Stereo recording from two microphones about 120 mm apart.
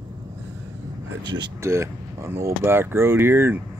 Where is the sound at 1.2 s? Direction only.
35° right (ahead or behind).